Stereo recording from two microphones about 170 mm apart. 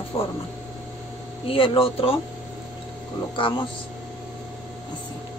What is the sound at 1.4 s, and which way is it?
Speech, 30° left (ahead or behind).